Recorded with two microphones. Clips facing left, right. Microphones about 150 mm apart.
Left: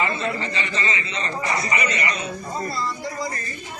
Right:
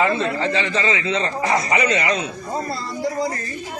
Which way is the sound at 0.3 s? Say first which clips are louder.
Right 6 dB; 90° right.